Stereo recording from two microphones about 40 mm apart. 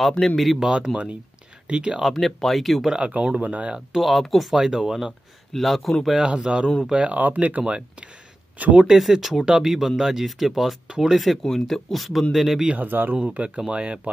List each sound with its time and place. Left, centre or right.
0.0 s a man's voice: centre
0.6 s a man's voice: right
2.0 s speech: centre
3.0 s a man's voice: right
3.9 s speech: centre
4.6 s speech: centre
5.5 s speech: centre
6.2 s a man's voice: right
7.2 s speech: right
8.8 s speech: centre
11.4 s speech: centre
12.7 s speech: right
13.1 s a man's voice: right